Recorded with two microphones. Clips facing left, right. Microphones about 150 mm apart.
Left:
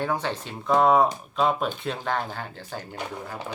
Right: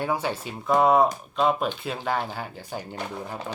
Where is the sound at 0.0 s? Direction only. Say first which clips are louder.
Right 1 dB; 10° right (ahead or behind).